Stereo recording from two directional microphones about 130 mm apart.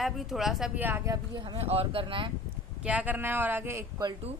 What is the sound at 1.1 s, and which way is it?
Speech, 35° right (ahead or behind).